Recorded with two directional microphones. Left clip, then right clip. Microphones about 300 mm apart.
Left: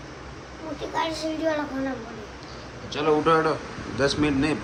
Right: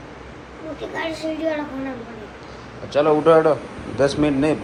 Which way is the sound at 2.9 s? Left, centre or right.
Centre.